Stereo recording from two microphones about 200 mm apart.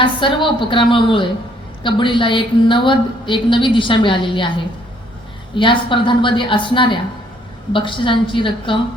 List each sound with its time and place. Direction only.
0.0 s a woman's voice: 25° left (ahead or behind)